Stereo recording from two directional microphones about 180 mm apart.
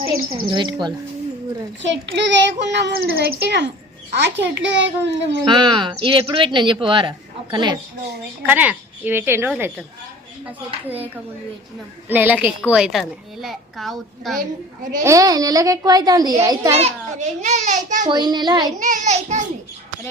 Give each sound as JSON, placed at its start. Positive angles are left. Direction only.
{"t": 0.0, "sound": "a child's voice", "side_deg": -30}
{"t": 1.9, "sound": "a child's voice", "side_deg": -85}
{"t": 4.7, "sound": "a child's voice", "side_deg": -85}
{"t": 5.5, "sound": "a child's voice", "side_deg": -25}
{"t": 8.4, "sound": "a woman's voice", "side_deg": -10}
{"t": 10.8, "sound": "a woman's voice", "side_deg": -10}
{"t": 15.0, "sound": "a child's voice", "side_deg": -20}
{"t": 16.7, "sound": "a child's voice", "side_deg": -35}
{"t": 18.1, "sound": "a child's voice", "side_deg": -25}
{"t": 18.8, "sound": "a child's voice", "side_deg": -45}